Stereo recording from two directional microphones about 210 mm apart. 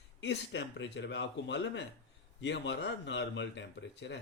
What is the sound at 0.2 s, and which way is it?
Speech, 60° left (ahead or behind).